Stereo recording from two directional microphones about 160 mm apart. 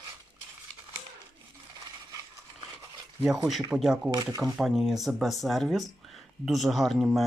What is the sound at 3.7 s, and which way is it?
Speech, 5° right (ahead or behind).